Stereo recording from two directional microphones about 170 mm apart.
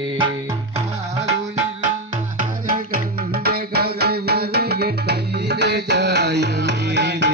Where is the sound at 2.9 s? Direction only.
65° right (ahead or behind).